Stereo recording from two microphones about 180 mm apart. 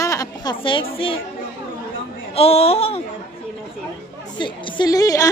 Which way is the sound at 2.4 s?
35° left (ahead or behind).